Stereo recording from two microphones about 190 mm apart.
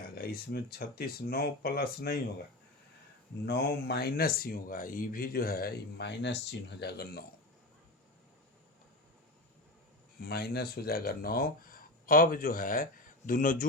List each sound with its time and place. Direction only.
0.2 s speech: 55° left (ahead or behind)
3.4 s speech: 60° left (ahead or behind)
10.2 s speech: 55° left (ahead or behind)